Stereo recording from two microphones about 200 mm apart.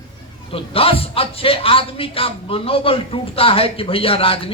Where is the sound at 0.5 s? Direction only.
30° left (ahead or behind).